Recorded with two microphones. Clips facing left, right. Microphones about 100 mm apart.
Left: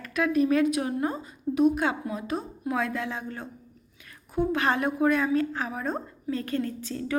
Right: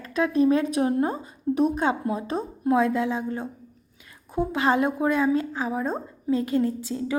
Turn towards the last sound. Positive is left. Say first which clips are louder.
# right 4 dB
turn(degrees=-20)  # may be behind; listen again after turning